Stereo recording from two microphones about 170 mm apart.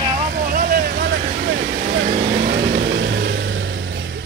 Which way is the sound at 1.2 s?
50° right (ahead or behind).